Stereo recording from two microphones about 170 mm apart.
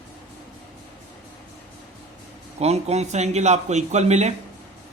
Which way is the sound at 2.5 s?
40° right (ahead or behind).